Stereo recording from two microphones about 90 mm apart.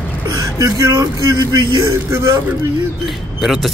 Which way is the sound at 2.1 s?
30° right (ahead or behind).